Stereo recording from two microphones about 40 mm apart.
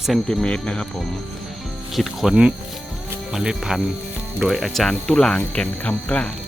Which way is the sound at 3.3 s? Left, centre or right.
Centre.